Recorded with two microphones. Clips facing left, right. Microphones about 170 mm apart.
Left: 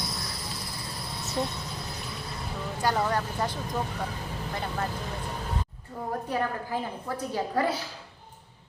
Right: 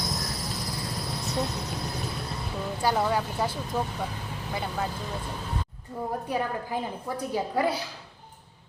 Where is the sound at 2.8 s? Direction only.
5° right (ahead or behind).